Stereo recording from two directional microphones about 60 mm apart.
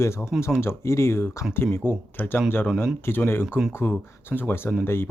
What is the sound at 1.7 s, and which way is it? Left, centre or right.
Speech, left.